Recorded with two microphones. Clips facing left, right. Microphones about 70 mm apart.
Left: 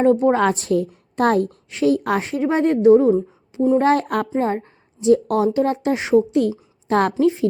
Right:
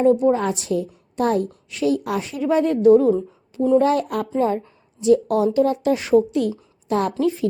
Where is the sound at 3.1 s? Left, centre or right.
Centre.